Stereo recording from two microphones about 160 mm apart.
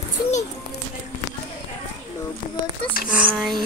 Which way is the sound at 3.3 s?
Centre (ahead or behind).